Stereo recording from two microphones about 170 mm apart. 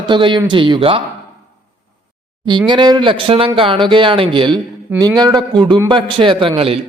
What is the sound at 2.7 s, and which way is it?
A man's voice, 25° right (ahead or behind).